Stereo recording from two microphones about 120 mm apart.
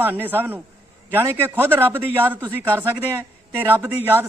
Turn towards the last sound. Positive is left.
turn(degrees=-15)  # may be behind; listen again after turning